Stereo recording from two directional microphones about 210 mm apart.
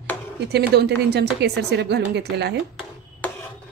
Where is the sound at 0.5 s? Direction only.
50° right (ahead or behind).